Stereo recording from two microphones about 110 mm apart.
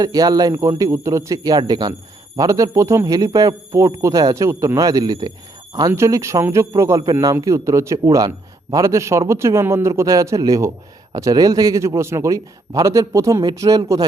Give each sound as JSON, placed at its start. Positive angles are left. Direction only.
{"t": 0.0, "sound": "a man's voice", "side_deg": -35}